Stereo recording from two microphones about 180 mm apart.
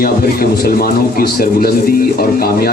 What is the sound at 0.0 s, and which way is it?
A man's voice, 55° left (ahead or behind).